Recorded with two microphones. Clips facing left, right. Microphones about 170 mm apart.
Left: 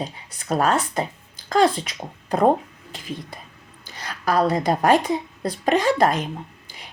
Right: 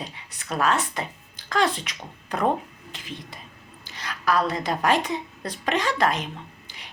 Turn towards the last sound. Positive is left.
turn(degrees=45)  # may be behind; listen again after turning